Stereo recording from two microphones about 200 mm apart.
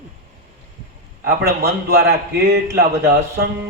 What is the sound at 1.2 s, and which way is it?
A man's voice, 50° right (ahead or behind).